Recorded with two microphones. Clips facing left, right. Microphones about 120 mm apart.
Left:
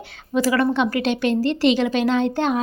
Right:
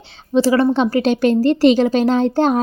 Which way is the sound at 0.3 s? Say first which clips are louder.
Right 5 dB; 30° right (ahead or behind).